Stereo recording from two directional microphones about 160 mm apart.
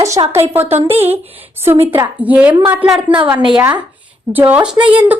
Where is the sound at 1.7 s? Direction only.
40° right (ahead or behind).